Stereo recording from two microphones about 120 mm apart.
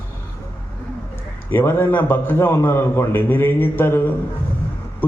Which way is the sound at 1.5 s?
20° left (ahead or behind).